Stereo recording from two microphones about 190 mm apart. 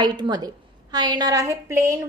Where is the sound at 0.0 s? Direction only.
20° right (ahead or behind).